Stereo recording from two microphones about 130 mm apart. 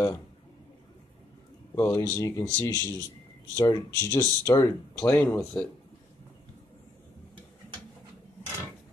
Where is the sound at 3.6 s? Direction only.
30° left (ahead or behind).